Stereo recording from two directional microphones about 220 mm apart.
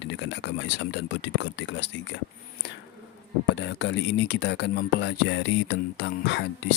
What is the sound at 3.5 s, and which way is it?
Speech, 50° left (ahead or behind).